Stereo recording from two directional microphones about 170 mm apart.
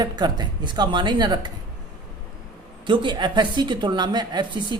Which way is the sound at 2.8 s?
30° right (ahead or behind).